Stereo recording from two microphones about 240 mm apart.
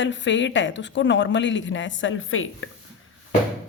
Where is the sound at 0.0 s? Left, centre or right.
Left.